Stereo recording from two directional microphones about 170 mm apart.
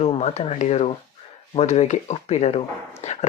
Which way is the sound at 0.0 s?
40° left (ahead or behind).